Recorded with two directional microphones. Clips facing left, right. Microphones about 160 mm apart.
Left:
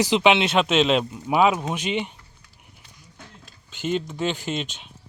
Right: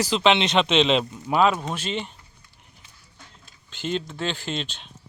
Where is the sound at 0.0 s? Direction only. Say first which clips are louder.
Left 2 dB; 15° left (ahead or behind).